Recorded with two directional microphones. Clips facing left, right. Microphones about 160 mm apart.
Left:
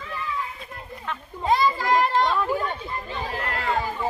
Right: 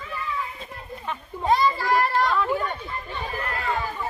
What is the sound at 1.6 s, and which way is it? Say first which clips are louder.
Children playing: left 1 dB; 15° left (ahead or behind).